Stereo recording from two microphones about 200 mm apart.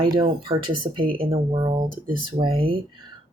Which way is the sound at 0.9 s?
45° right (ahead or behind).